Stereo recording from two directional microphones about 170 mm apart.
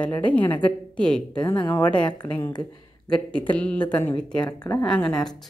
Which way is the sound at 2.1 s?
25° left (ahead or behind).